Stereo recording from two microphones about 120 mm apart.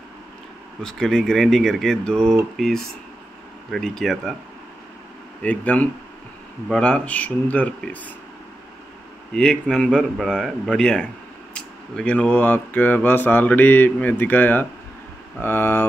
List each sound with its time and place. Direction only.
0.8 s speech: 5° left (ahead or behind)
5.4 s speech: 10° left (ahead or behind)
9.3 s speech: 5° left (ahead or behind)